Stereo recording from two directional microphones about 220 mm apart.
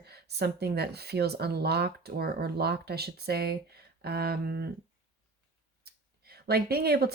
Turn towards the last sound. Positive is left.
turn(degrees=-45)  # may be behind; listen again after turning